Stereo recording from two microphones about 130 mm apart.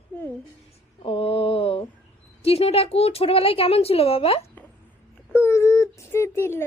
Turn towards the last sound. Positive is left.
turn(degrees=20)  # may be behind; listen again after turning